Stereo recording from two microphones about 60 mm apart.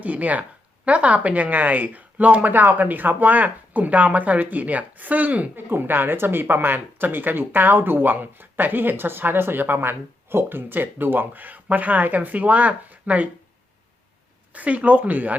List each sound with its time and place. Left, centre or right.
0.0 s speech: right
14.5 s speech: right